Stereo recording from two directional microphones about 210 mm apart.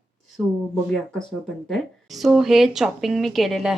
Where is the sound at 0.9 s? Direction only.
Centre (ahead or behind).